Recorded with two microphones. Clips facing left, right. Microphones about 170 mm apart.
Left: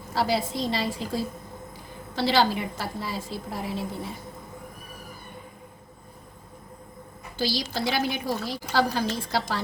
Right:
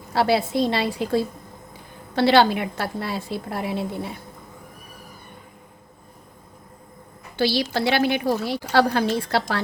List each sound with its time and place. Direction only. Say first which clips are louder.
0.1 s a woman's voice: right 5 dB; 65° right (ahead or behind)
7.3 s a woman's voice: right 6 dB; 65° right (ahead or behind)